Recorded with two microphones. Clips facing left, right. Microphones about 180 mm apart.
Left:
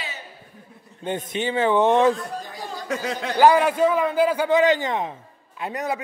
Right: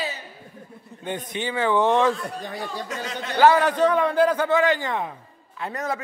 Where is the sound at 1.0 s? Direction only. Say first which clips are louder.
Left 3 dB; 20° left (ahead or behind).